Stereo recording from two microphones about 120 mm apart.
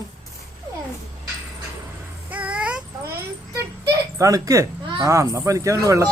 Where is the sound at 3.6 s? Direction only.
25° right (ahead or behind).